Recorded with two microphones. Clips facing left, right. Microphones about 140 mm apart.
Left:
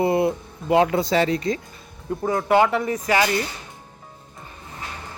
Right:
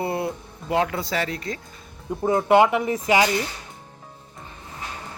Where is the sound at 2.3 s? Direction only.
20° right (ahead or behind).